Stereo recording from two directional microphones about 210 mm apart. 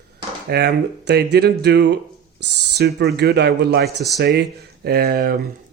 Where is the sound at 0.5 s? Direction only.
50° right (ahead or behind).